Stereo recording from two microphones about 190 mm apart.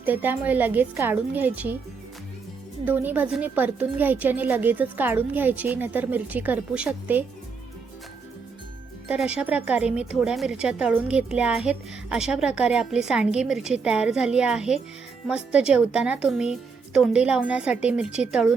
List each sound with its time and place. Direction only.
0.0 s a woman's voice: 10° right (ahead or behind)
2.8 s a woman's voice: 10° right (ahead or behind)
9.0 s speech: 5° right (ahead or behind)